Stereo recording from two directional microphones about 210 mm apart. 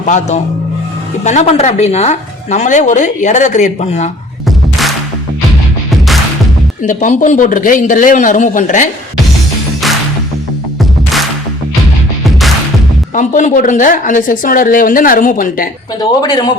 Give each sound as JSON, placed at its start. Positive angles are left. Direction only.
{"t": 0.0, "sound": "speech", "side_deg": 35}
{"t": 4.4, "sound": "music", "side_deg": 0}
{"t": 6.8, "sound": "speech", "side_deg": 40}
{"t": 13.1, "sound": "speech", "side_deg": 35}
{"t": 16.0, "sound": "speech", "side_deg": 20}